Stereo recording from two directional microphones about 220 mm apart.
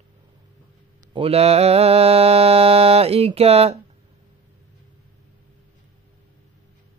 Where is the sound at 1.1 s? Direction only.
25° right (ahead or behind).